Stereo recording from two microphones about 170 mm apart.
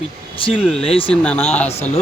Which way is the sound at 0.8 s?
35° left (ahead or behind).